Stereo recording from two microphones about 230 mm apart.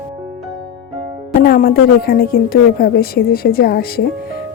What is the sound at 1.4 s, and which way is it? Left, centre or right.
A woman's voice, left.